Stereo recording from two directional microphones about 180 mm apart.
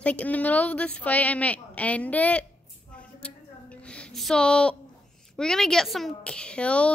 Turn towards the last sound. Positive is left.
turn(degrees=5)  # may be behind; listen again after turning